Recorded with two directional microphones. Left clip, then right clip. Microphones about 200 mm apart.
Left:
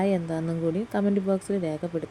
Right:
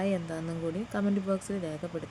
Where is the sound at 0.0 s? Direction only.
20° left (ahead or behind).